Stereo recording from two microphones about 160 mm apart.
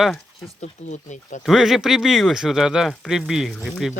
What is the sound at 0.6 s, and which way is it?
Speech, 50° left (ahead or behind).